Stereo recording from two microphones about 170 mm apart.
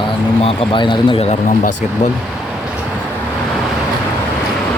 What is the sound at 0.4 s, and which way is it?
Speech, 30° left (ahead or behind).